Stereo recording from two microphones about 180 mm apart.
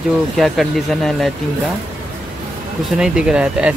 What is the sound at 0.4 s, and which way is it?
Speech, centre (ahead or behind).